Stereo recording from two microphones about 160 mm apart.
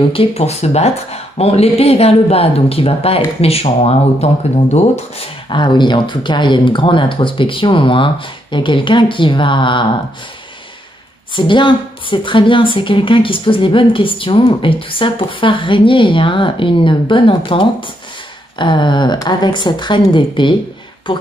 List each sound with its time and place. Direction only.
0.1 s a woman's voice: 35° left (ahead or behind)
5.5 s a woman's voice: 30° left (ahead or behind)
11.3 s a woman's voice: 30° left (ahead or behind)